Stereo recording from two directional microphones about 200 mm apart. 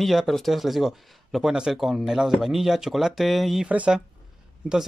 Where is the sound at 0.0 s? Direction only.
Centre (ahead or behind).